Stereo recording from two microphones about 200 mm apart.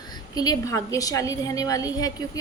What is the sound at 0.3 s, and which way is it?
A woman's voice, 15° left (ahead or behind).